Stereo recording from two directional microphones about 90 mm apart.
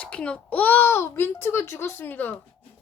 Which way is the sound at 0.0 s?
15° left (ahead or behind).